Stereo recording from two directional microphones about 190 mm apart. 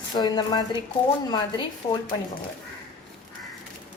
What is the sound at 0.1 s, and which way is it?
Speech, 20° left (ahead or behind).